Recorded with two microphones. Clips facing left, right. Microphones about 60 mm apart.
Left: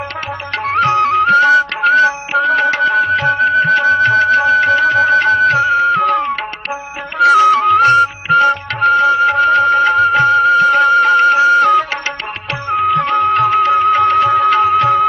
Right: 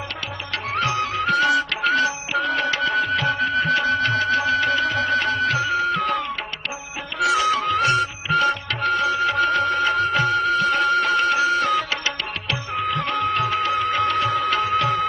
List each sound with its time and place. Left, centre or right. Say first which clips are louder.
0.5 s music: left 10 dB; left
2.9 s music: left 8 dB; left
3.2 s music: left 9 dB; left
14.5 s music of bollywood: left 9 dB; left